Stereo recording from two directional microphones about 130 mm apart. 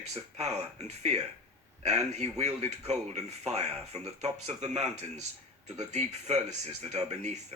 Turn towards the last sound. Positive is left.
turn(degrees=-60)  # may be behind; listen again after turning